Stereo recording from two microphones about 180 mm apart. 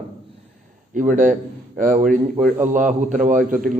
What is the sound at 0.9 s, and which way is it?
Speech, 45° right (ahead or behind).